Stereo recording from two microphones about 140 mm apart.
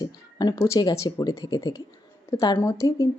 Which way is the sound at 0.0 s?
30° left (ahead or behind).